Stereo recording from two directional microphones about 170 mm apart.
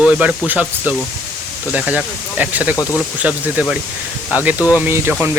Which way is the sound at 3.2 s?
5° right (ahead or behind).